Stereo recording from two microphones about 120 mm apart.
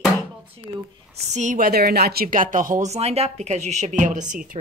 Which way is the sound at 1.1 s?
85° right.